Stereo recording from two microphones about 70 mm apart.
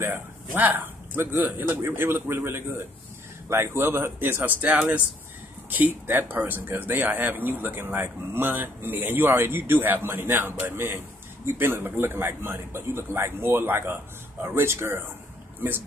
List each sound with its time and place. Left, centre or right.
0.0 s a man's voice: right